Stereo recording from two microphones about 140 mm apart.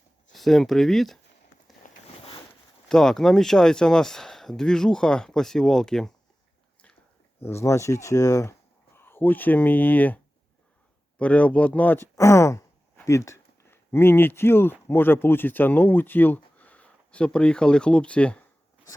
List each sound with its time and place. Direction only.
0.3 s speech: centre (ahead or behind)
1.8 s a sound: 70° left (ahead or behind)
2.9 s speech: 5° left (ahead or behind)
7.4 s speech: 20° left (ahead or behind)
11.2 s speech: 10° left (ahead or behind)
12.1 s sigh: 20° left (ahead or behind)
13.1 s speech: 20° left (ahead or behind)